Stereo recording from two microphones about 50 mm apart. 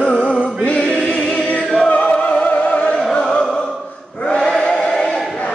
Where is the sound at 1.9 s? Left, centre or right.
Left.